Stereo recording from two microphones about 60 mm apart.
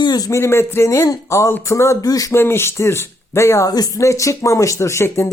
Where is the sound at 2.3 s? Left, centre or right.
Left.